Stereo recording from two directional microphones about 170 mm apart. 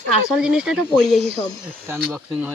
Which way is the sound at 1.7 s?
15° right (ahead or behind).